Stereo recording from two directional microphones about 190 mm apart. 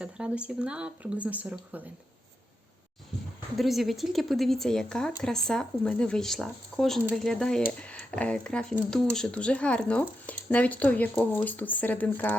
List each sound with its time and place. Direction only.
0.0 s speech: 5° right (ahead or behind)
3.6 s speech: centre (ahead or behind)